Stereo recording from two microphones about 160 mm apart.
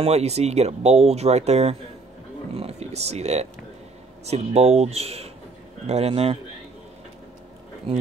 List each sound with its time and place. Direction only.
0.0 s speech: 40° right (ahead or behind)